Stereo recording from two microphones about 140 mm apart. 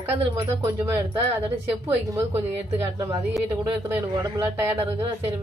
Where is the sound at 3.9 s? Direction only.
20° right (ahead or behind).